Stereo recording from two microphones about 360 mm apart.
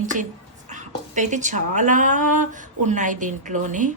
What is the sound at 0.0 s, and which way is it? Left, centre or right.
A woman's voice, right.